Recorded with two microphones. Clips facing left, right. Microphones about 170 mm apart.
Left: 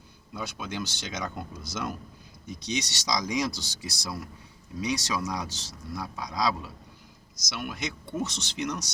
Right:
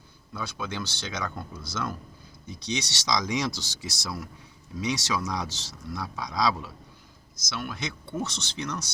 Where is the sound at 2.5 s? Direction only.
15° left (ahead or behind).